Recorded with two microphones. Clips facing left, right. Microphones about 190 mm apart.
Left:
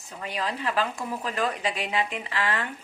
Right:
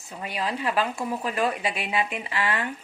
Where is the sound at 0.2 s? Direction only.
10° right (ahead or behind).